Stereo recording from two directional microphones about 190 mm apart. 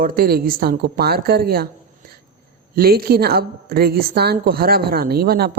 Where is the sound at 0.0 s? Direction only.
50° right (ahead or behind).